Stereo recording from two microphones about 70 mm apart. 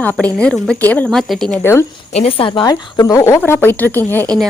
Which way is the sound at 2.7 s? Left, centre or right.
Left.